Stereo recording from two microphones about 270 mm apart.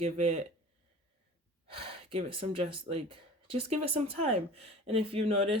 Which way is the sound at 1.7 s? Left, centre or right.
Right.